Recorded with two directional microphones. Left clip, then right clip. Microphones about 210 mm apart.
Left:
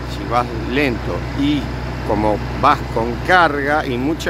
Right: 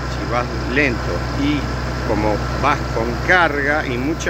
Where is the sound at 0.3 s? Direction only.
30° left (ahead or behind).